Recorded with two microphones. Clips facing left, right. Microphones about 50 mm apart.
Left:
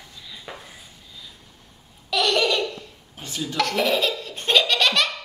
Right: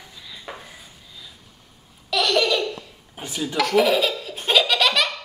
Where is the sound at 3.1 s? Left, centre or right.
Centre.